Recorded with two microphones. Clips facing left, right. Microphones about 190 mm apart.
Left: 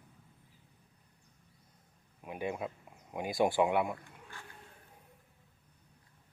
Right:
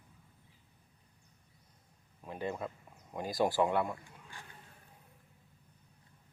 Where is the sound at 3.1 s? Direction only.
20° left (ahead or behind).